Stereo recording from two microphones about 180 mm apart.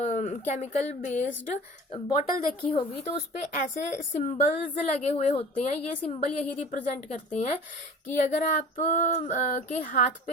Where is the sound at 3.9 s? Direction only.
45° left (ahead or behind).